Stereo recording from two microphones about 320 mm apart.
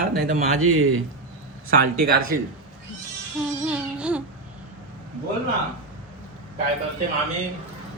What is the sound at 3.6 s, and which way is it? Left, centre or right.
Music, centre.